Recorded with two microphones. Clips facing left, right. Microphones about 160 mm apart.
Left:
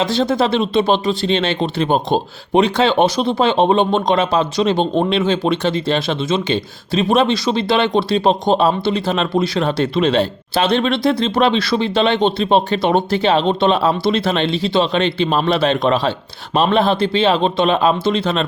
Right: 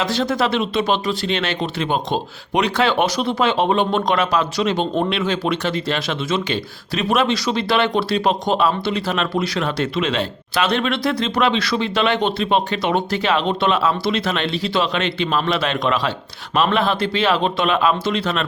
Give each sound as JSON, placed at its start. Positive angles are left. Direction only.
{"t": 0.0, "sound": "speech", "side_deg": 25}